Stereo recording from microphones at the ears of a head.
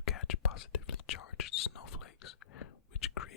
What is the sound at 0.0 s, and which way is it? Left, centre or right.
Whispering, left.